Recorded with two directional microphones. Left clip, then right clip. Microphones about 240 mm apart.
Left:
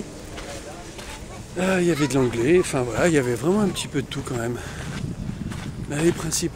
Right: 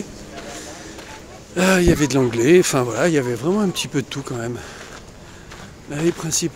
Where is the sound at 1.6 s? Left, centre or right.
Right.